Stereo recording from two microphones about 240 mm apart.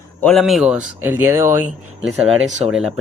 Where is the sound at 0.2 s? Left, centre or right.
Centre.